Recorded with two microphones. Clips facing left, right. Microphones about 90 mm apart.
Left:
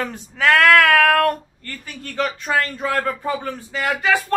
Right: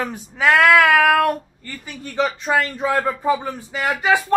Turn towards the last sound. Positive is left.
turn(degrees=-10)  # may be behind; listen again after turning